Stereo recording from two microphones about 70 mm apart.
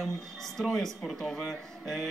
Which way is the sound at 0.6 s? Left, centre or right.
Centre.